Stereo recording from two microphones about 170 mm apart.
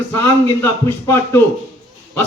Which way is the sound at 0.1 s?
15° left (ahead or behind).